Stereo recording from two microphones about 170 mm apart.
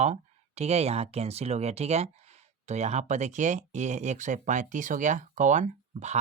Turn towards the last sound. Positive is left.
turn(degrees=-45)  # may be behind; listen again after turning